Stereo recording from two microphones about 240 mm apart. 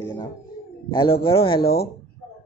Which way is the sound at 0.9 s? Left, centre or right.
Left.